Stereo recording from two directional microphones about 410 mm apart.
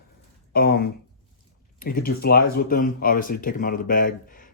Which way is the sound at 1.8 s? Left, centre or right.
Left.